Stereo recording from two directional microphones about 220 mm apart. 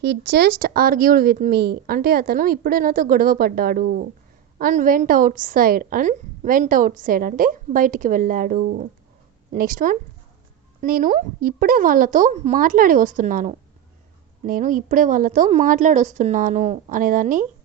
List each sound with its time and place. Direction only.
0.0 s a woman's voice: 50° right (ahead or behind)